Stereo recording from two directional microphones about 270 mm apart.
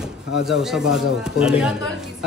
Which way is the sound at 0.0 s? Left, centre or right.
Centre.